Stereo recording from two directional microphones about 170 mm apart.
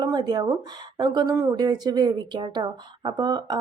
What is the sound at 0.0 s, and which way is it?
Speech, 25° right (ahead or behind).